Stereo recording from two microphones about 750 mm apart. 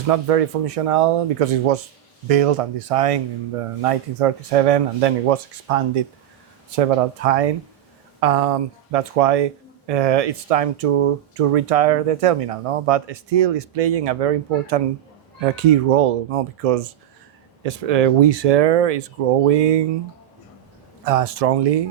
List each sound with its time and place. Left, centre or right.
0.1 s speech: right
21.0 s speech: right